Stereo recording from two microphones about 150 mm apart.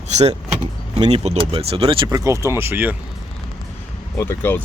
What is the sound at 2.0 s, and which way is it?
Speech, 20° right (ahead or behind).